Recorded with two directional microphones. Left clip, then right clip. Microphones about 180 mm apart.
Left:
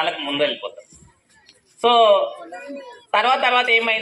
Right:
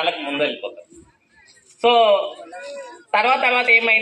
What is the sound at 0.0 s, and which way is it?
Speech, 35° left (ahead or behind).